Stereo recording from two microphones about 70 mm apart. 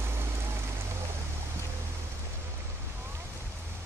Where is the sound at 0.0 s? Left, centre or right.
Right.